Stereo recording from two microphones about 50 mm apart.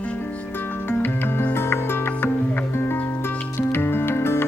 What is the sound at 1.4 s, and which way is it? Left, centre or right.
Music, left.